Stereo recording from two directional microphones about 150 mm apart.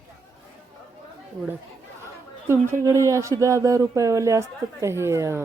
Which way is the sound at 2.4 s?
15° right (ahead or behind).